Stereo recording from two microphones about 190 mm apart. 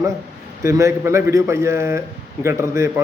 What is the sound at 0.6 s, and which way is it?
A man's voice, 15° right (ahead or behind).